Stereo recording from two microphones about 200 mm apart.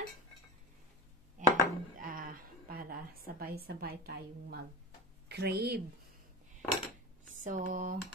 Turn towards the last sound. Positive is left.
turn(degrees=-40)  # may be behind; listen again after turning